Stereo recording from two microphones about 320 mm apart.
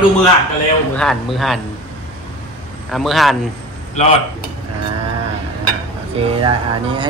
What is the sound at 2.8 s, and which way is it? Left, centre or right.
Speech, centre.